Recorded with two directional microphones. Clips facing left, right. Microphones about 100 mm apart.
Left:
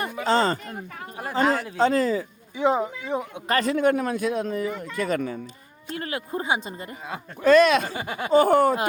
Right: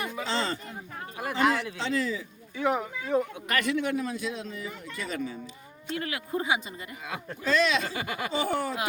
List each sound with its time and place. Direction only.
0.0 s a sound: 45° left (ahead or behind)
0.6 s speech: 65° left (ahead or behind)
1.1 s speech: 35° left (ahead or behind)
2.6 s speech: 25° left (ahead or behind)
3.4 s speech: 35° left (ahead or behind); by 5.4 s 55° left (ahead or behind)
5.9 s speech: 40° left (ahead or behind)
7.4 s speech: 55° left (ahead or behind)